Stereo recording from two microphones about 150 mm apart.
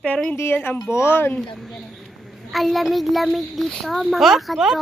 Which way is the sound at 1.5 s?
Centre (ahead or behind).